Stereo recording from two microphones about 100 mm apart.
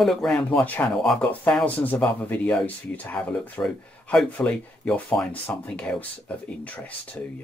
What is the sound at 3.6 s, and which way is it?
A man's voice, 5° left (ahead or behind).